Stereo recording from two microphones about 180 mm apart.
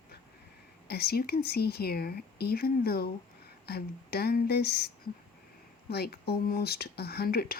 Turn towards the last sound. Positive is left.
turn(degrees=60)  # may be behind; listen again after turning